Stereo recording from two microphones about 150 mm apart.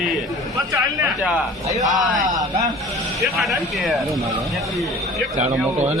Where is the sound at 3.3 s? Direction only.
Centre (ahead or behind).